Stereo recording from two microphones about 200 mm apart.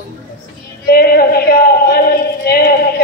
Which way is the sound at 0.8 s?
50° left (ahead or behind).